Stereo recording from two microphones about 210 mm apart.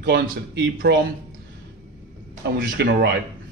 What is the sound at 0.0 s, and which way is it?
A man's voice, 50° right (ahead or behind).